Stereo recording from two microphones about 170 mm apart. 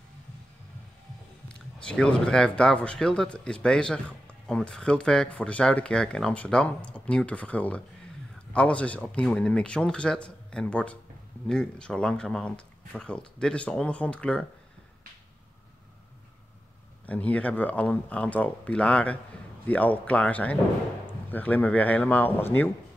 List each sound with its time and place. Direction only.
1.5 s speech: 5° left (ahead or behind)
17.0 s speech: 10° left (ahead or behind)